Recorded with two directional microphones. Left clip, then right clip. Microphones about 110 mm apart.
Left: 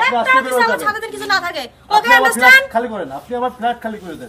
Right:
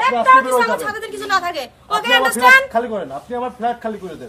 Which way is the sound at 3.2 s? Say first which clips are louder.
Left 4 dB; 35° right (ahead or behind).